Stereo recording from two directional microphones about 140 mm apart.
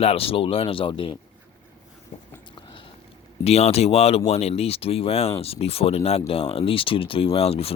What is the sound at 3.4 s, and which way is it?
Speech, 50° left (ahead or behind).